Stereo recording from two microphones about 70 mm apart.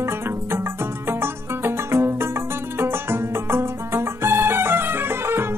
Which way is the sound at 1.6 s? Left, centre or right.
Right.